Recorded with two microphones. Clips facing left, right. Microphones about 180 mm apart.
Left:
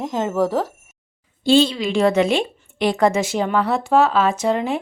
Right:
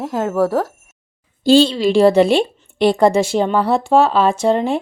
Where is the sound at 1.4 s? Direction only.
35° right (ahead or behind).